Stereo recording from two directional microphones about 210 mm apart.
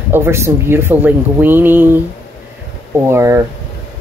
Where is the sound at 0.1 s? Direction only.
10° right (ahead or behind).